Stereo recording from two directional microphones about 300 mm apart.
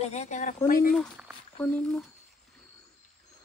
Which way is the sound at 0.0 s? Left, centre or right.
Left.